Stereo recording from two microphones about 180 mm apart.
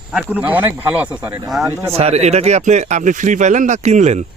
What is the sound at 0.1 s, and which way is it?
Speech, 5° right (ahead or behind).